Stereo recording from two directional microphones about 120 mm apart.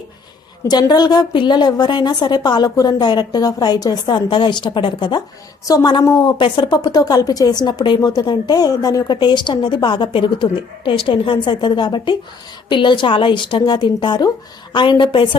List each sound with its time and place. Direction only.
0.7 s a woman's voice: 35° left (ahead or behind)